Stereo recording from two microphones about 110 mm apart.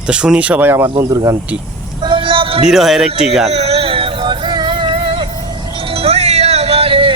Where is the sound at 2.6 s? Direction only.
5° right (ahead or behind).